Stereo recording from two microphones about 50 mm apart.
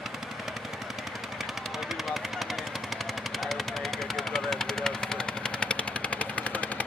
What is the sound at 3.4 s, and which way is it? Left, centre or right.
Machine gun, centre.